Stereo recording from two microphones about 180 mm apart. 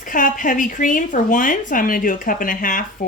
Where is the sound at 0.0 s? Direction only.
50° left (ahead or behind).